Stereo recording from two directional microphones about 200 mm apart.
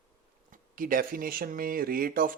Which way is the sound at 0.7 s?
45° right (ahead or behind).